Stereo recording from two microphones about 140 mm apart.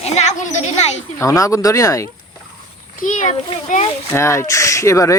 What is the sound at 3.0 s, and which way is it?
Speech, 65° left (ahead or behind).